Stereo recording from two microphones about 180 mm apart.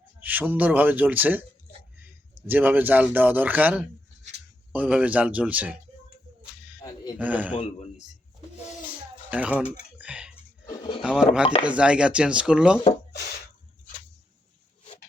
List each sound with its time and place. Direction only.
0.2 s a man's voice: 10° right (ahead or behind)
6.8 s a sound: 20° left (ahead or behind)
7.2 s speech: 10° right (ahead or behind)
7.5 s a man's voice: 40° left (ahead or behind)
9.3 s speech: 5° right (ahead or behind)
10.0 s a sound: 5° right (ahead or behind)
10.8 s a sound: 25° left (ahead or behind)
11.0 s chopping: 5° right (ahead or behind)
11.6 s speech: 5° right (ahead or behind)